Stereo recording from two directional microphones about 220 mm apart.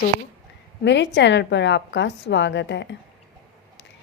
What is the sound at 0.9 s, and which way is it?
A woman's voice, 55° left (ahead or behind).